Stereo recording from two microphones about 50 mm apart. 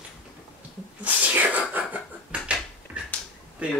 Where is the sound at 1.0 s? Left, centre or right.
Right.